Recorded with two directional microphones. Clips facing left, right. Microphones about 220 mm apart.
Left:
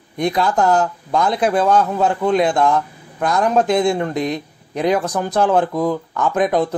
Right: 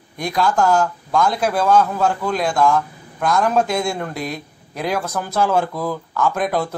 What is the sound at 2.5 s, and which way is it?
Speech, 20° left (ahead or behind).